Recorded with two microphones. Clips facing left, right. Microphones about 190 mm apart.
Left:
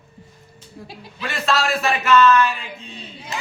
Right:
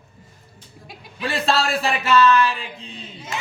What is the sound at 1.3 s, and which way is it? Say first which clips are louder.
A man's voice: even; 30° right (ahead or behind).